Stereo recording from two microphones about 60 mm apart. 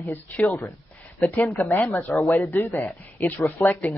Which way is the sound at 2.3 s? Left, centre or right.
Left.